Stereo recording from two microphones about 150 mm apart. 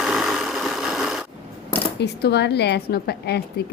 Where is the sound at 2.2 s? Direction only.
90° left.